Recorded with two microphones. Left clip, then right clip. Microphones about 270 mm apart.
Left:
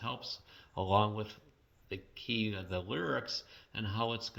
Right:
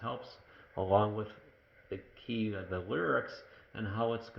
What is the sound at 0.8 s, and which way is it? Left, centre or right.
Speech, left.